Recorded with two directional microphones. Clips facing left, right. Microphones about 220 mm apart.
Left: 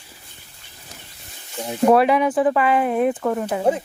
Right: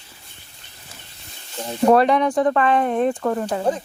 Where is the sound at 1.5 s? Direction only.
10° left (ahead or behind).